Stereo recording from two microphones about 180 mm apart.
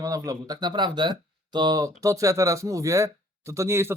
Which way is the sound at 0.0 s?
20° right (ahead or behind).